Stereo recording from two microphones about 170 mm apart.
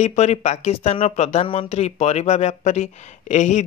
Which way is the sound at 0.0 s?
40° left (ahead or behind).